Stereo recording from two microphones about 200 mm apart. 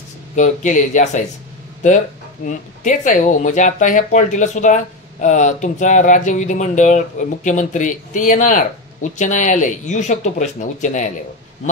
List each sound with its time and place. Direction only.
0.4 s speech: 40° left (ahead or behind)
2.4 s speech: 40° left (ahead or behind)